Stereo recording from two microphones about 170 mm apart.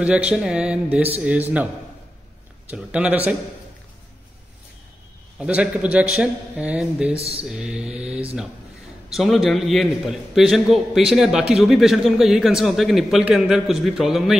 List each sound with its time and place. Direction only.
0.0 s speech: 5° right (ahead or behind)
2.7 s speech: 5° right (ahead or behind)
5.4 s speech: 5° right (ahead or behind)
7.2 s a sound: 35° right (ahead or behind)
7.4 s a man's voice: 5° right (ahead or behind)